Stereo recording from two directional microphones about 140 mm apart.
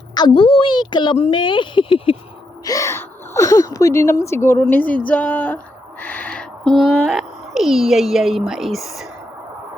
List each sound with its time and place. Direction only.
0.1 s speech: 35° left (ahead or behind)
2.6 s a child's voice: 20° left (ahead or behind); by 9.0 s centre (ahead or behind)